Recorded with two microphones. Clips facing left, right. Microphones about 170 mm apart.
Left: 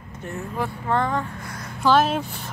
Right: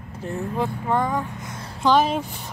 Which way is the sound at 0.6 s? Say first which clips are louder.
Even; 15° right (ahead or behind).